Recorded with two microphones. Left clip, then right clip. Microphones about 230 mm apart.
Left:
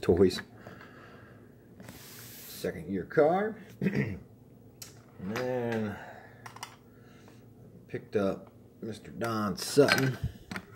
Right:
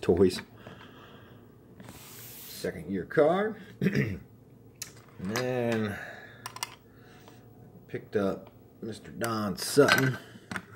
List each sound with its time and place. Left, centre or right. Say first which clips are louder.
0.0 s a sound: right 1 dB; centre
2.6 s speech: right 1 dB; centre
3.8 s speech: right 3 dB; right
5.4 s speech: right 2 dB; right
7.9 s speech: right 1 dB; centre